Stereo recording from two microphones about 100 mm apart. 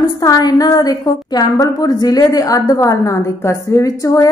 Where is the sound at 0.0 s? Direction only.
40° left (ahead or behind).